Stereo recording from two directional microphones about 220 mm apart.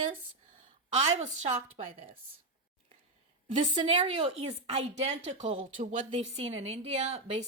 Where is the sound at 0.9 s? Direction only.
30° right (ahead or behind).